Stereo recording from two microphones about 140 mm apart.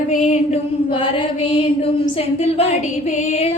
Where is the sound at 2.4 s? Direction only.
45° left (ahead or behind).